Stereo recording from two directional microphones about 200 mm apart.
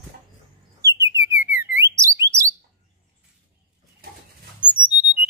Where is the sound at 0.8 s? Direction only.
15° right (ahead or behind).